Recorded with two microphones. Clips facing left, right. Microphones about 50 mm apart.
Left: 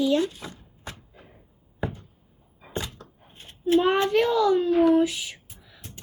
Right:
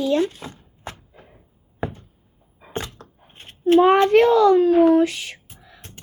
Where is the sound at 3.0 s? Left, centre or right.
Right.